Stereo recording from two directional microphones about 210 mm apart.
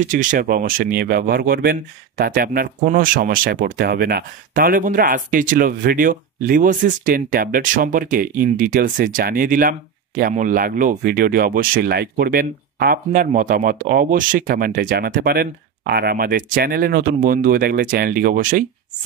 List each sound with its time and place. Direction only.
0.1 s speech: 40° right (ahead or behind)